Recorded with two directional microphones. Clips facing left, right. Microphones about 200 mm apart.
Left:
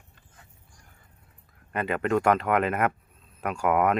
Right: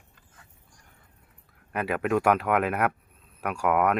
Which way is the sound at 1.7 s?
5° right (ahead or behind).